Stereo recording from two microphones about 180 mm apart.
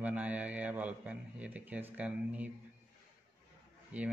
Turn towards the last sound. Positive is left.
turn(degrees=-10)  # may be behind; listen again after turning